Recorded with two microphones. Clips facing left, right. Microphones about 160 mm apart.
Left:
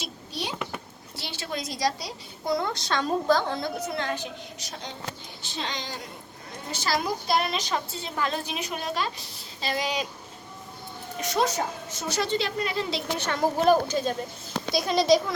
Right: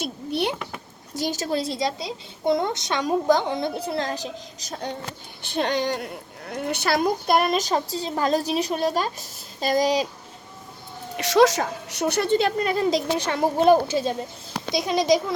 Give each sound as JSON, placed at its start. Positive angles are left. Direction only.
{"t": 0.0, "sound": "a sound", "side_deg": -60}
{"t": 1.1, "sound": "a woman's voice", "side_deg": -45}
{"t": 3.8, "sound": "a woman's voice", "side_deg": -35}
{"t": 5.4, "sound": "a woman's voice", "side_deg": -60}
{"t": 11.2, "sound": "a woman's voice", "side_deg": -90}
{"t": 13.3, "sound": "a woman's voice", "side_deg": -20}